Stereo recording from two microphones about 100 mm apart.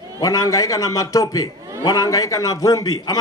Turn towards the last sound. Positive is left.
turn(degrees=35)  # may be behind; listen again after turning